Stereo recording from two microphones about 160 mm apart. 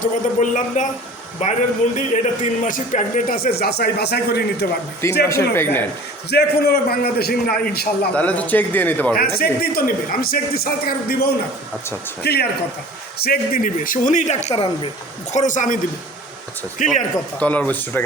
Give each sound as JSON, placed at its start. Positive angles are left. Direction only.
{"t": 0.0, "sound": "speech", "side_deg": 50}
{"t": 5.3, "sound": "speech", "side_deg": 15}
{"t": 6.3, "sound": "a man's voice", "side_deg": 85}
{"t": 8.1, "sound": "speech", "side_deg": 10}
{"t": 9.4, "sound": "speech", "side_deg": 65}
{"t": 12.2, "sound": "speech", "side_deg": 90}
{"t": 13.1, "sound": "speech", "side_deg": 70}
{"t": 15.3, "sound": "speech", "side_deg": 50}
{"t": 17.4, "sound": "speech", "side_deg": 10}